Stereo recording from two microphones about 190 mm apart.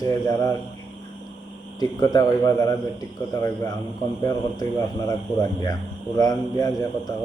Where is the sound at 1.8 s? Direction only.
20° left (ahead or behind).